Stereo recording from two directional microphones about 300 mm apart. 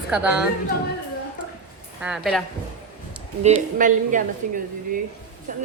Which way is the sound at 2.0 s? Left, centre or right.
Centre.